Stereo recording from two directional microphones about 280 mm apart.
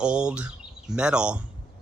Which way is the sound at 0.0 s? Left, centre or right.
Centre.